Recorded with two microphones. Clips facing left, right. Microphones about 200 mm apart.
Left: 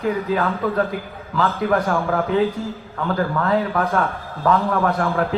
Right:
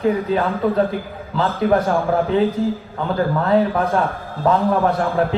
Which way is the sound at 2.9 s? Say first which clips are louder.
Even; 30° right (ahead or behind).